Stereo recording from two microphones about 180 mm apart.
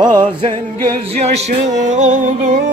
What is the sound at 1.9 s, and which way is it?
Music, 40° right (ahead or behind).